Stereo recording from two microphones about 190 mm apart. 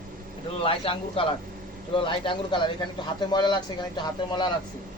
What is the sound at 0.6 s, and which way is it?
Speech, 30° left (ahead or behind).